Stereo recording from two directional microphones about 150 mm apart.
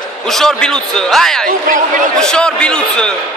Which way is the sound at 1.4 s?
65° right (ahead or behind).